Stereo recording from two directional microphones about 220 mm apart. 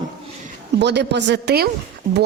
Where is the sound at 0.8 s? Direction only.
50° right (ahead or behind).